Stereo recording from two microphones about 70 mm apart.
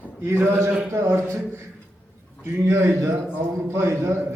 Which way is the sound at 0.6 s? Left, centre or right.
Centre.